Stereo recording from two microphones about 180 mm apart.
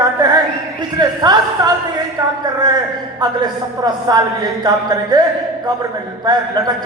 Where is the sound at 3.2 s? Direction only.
20° right (ahead or behind).